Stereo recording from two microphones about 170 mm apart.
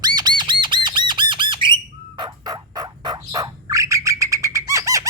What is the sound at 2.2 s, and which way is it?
Turkey, 25° right (ahead or behind).